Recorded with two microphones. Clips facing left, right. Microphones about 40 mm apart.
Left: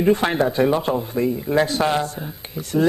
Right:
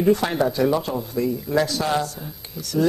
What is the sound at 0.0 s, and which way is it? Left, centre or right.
Speech, left.